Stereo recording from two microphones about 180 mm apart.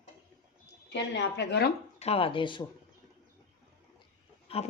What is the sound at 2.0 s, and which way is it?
Speech, 35° left (ahead or behind).